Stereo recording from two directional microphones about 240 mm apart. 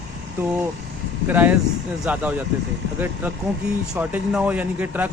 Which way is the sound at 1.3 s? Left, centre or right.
Centre.